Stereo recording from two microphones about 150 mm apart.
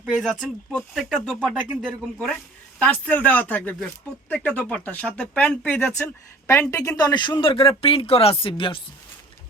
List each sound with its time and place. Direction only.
0.0 s speech: centre (ahead or behind); by 8.8 s 35° left (ahead or behind)